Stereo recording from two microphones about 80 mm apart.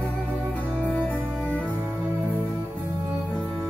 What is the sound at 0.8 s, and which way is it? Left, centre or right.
Music, centre.